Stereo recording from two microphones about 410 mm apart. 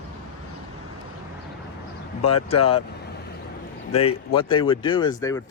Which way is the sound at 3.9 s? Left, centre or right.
Centre.